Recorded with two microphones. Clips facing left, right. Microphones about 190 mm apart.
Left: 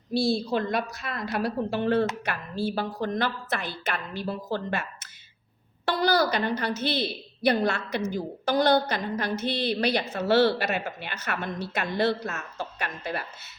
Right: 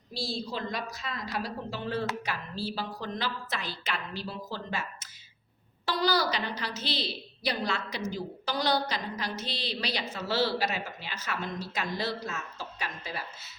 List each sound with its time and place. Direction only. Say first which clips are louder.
0.1 s a woman's voice: left 10 dB; 60° left (ahead or behind)